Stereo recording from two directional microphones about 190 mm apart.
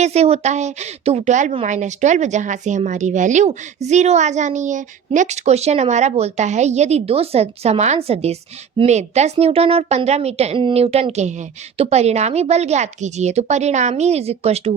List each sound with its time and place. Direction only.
0.0 s a woman's voice: 35° right (ahead or behind)